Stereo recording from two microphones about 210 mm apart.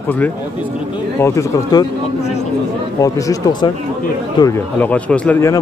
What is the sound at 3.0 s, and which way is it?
Speech, 20° left (ahead or behind).